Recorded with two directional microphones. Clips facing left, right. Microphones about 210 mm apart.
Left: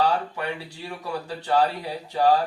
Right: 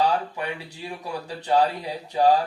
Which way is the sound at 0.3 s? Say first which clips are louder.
Left 1 dB; 15° right (ahead or behind).